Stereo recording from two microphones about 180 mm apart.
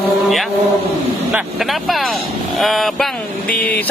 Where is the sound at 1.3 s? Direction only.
Centre (ahead or behind).